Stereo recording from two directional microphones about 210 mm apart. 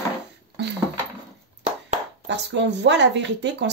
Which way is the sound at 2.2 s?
55° right (ahead or behind).